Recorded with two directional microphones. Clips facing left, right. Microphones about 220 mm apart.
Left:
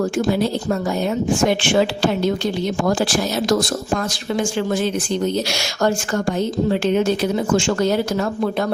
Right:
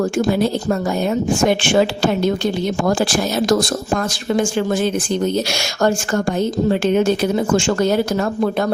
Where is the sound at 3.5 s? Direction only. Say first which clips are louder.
Right 1 dB; 50° right (ahead or behind).